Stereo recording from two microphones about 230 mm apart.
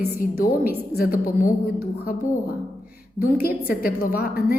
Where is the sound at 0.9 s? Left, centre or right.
Left.